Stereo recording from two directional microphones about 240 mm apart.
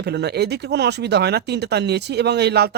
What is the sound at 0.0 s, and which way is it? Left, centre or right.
Speech, right.